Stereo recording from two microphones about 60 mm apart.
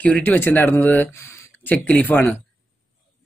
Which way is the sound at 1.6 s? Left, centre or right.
Left.